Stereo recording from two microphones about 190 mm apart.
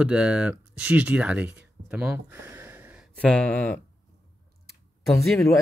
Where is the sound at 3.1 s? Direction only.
5° left (ahead or behind).